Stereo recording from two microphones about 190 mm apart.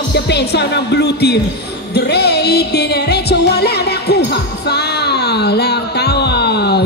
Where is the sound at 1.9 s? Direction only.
60° left (ahead or behind).